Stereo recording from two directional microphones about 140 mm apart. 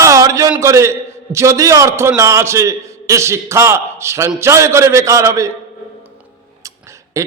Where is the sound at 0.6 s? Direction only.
20° right (ahead or behind).